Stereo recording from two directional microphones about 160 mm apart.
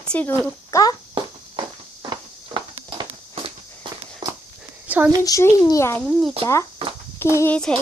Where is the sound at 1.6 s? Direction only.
30° right (ahead or behind).